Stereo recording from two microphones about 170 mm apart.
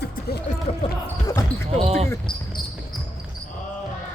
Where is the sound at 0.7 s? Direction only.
35° left (ahead or behind).